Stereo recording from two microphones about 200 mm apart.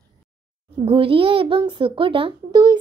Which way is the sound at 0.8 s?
25° right (ahead or behind).